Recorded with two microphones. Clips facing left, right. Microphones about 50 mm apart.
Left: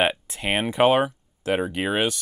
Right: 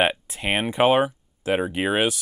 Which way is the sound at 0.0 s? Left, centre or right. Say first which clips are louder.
Right 1 dB; centre.